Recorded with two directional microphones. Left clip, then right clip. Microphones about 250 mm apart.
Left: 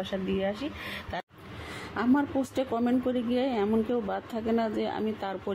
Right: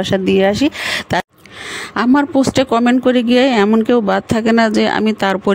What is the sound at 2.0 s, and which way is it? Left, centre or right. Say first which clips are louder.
Speech: right 14 dB; right.